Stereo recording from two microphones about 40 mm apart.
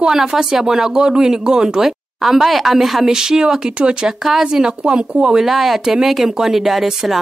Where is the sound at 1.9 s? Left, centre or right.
Centre.